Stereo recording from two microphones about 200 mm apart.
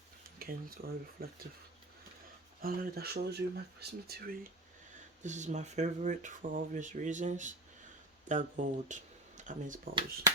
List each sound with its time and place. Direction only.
0.3 s speech: 50° right (ahead or behind)
2.6 s speech: 50° right (ahead or behind)
5.2 s speech: 35° right (ahead or behind)